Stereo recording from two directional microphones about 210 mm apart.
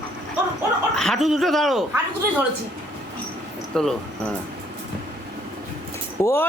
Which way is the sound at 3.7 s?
5° left (ahead or behind).